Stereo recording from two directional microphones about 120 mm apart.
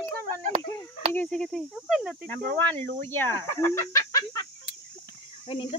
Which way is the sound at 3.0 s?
20° left (ahead or behind).